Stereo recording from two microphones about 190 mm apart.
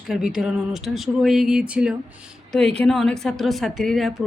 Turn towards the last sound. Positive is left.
turn(degrees=0)  # may be behind; listen again after turning